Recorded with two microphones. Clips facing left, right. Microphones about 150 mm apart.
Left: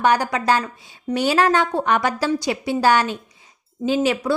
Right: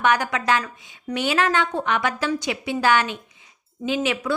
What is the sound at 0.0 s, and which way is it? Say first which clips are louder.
A woman's voice: left 3 dB; 35° left (ahead or behind).